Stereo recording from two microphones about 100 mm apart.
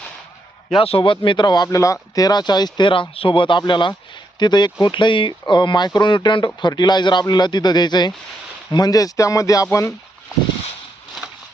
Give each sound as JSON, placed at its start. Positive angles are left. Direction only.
{"t": 0.8, "sound": "speech", "side_deg": 65}